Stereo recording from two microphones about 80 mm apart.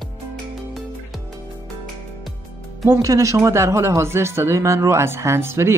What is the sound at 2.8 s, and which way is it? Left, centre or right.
Speech, right.